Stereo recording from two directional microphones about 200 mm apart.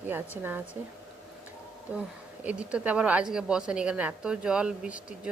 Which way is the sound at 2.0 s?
5° right (ahead or behind).